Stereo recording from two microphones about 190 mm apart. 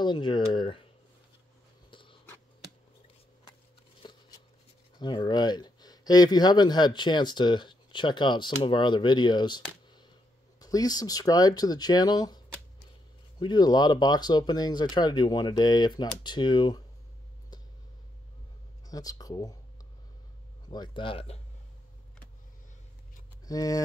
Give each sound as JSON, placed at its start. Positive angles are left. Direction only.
{"t": 0.0, "sound": "speech", "side_deg": 25}
{"t": 1.9, "sound": "writing", "side_deg": 25}
{"t": 4.0, "sound": "a sound", "side_deg": 25}
{"t": 4.9, "sound": "speech", "side_deg": 25}
{"t": 18.9, "sound": "speech", "side_deg": 20}
{"t": 20.6, "sound": "speech", "side_deg": 20}
{"t": 23.4, "sound": "speech", "side_deg": 20}